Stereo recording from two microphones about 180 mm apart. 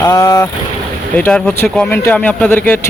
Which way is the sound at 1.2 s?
5° left (ahead or behind).